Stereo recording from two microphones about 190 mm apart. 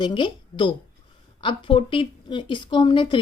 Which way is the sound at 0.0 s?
25° left (ahead or behind).